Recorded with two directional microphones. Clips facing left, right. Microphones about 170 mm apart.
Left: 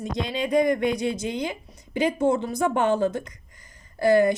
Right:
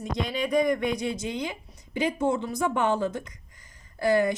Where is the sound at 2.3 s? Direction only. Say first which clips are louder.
Left 3 dB; 45° left (ahead or behind).